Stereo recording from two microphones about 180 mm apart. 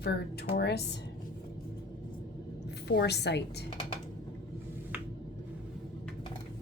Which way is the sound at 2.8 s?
65° left (ahead or behind).